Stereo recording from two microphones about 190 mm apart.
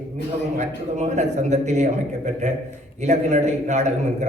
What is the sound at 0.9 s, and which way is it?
A man's voice, 35° right (ahead or behind).